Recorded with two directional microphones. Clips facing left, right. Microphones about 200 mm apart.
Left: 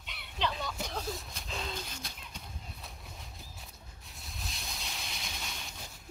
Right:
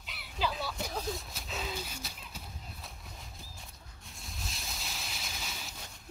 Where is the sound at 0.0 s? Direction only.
Centre (ahead or behind).